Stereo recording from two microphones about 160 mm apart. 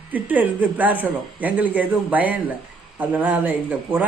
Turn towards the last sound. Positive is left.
turn(degrees=-10)  # may be behind; listen again after turning